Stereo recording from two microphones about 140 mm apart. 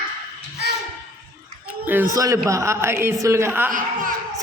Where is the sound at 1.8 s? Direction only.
20° right (ahead or behind).